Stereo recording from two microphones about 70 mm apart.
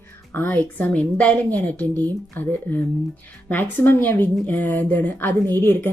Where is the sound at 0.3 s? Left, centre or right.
Left.